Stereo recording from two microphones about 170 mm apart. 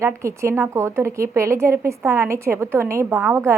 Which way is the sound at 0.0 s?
15° right (ahead or behind).